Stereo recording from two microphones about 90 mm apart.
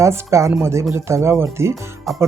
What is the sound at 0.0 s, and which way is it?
Speech, 35° right (ahead or behind).